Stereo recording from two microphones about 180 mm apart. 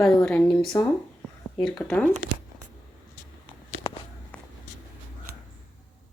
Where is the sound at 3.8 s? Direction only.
30° left (ahead or behind).